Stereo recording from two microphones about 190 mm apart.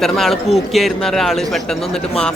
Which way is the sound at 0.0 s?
Centre (ahead or behind).